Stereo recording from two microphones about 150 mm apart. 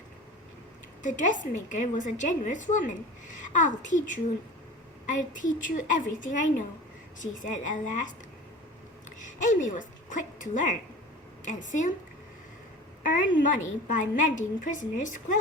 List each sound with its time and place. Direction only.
1.0 s a woman's voice: 60° left (ahead or behind)
9.2 s a woman's voice: 55° left (ahead or behind)
13.0 s a woman's voice: 65° left (ahead or behind)